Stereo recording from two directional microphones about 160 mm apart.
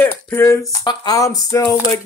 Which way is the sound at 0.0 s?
10° left (ahead or behind).